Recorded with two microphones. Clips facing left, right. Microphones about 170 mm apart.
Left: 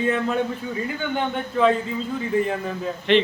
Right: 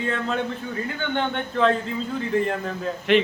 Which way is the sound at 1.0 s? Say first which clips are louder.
Right 1 dB; 5° left (ahead or behind).